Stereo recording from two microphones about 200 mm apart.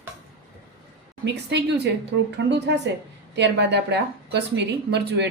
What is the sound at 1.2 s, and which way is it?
A woman's voice, 60° right (ahead or behind).